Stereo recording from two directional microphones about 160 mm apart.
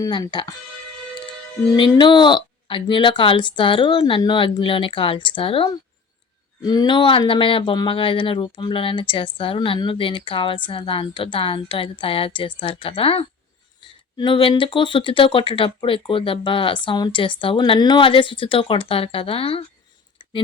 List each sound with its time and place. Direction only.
0.0 s speech: 25° left (ahead or behind)
1.7 s speech: 30° left (ahead or behind)